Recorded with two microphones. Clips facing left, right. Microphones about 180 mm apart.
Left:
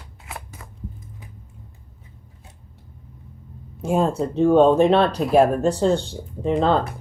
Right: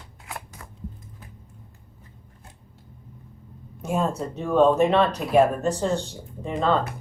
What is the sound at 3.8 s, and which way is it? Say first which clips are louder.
Speech: left 5 dB; 30° left (ahead or behind).